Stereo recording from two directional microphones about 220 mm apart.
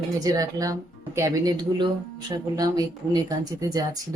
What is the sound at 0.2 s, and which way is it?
Speech, 15° right (ahead or behind).